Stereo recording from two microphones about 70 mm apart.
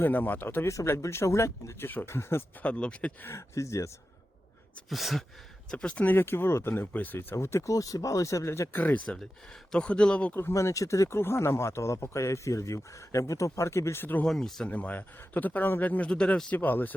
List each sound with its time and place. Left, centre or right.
0.0 s speech: left
0.7 s speech: left
2.6 s speech: centre
3.2 s speech: left
4.9 s speech: centre
5.7 s speech: centre
6.1 s speech: left
7.3 s speech: left
8.7 s speech: left
10.5 s speech: left
14.3 s speech: centre
14.7 s speech: left